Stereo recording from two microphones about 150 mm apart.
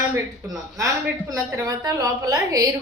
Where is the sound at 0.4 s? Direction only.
20° right (ahead or behind).